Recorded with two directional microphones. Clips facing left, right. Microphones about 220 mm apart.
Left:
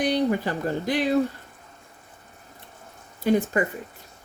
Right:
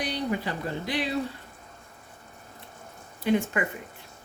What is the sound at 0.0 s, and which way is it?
Speech, 45° left (ahead or behind).